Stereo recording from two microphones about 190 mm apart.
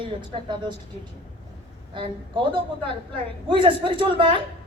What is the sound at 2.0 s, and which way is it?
A woman's voice, 25° right (ahead or behind).